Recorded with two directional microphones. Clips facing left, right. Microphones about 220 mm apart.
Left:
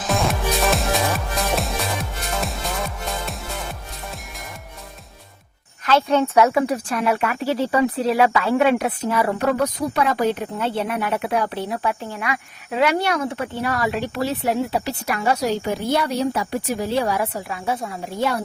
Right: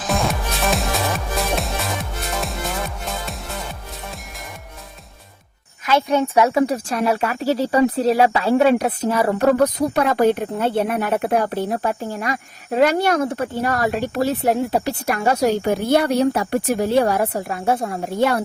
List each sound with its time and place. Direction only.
0.1 s music: centre (ahead or behind)
5.8 s speech: 10° right (ahead or behind)
6.5 s speech: 40° right (ahead or behind); by 18.4 s 60° right (ahead or behind)